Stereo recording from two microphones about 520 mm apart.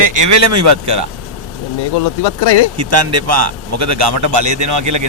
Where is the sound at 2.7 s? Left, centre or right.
Right.